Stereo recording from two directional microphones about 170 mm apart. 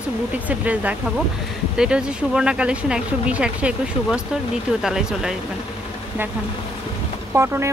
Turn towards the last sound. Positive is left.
turn(degrees=-15)  # may be behind; listen again after turning